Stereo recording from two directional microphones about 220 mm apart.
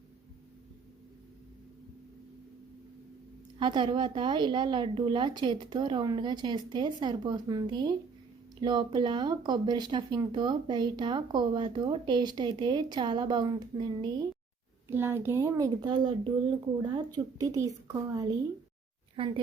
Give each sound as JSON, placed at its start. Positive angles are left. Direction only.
{"t": 3.6, "sound": "a woman's voice", "side_deg": -20}